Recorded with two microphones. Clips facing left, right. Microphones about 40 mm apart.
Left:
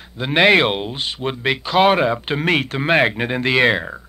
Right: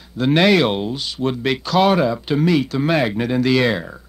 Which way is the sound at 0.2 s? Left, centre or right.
Left.